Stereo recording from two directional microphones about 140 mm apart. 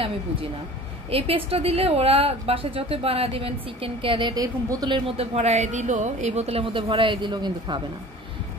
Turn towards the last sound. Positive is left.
turn(degrees=-30)  # may be behind; listen again after turning